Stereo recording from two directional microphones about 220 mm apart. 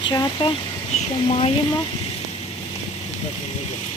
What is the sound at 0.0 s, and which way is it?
Speech, 20° left (ahead or behind).